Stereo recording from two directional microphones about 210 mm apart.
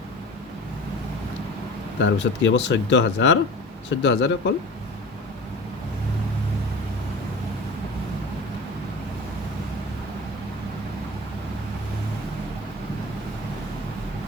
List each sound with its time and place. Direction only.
2.0 s speech: 60° left (ahead or behind)